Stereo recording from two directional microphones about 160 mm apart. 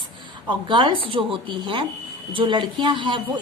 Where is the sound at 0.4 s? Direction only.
30° right (ahead or behind).